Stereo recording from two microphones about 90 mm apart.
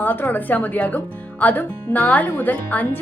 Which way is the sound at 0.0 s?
20° left (ahead or behind).